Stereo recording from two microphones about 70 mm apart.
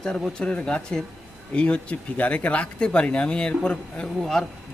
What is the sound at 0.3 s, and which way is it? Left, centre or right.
Speech, centre.